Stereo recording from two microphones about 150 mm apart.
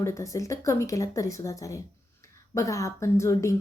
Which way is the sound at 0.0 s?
20° left (ahead or behind).